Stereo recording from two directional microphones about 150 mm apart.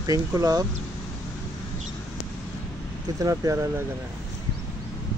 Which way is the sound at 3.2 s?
20° right (ahead or behind).